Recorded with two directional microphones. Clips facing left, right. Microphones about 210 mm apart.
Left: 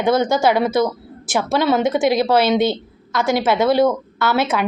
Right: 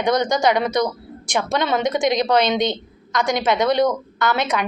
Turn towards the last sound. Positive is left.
turn(degrees=5)  # may be behind; listen again after turning